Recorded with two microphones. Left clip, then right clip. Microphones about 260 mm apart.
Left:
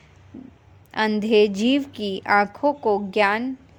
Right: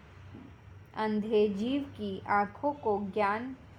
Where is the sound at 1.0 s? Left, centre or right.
Left.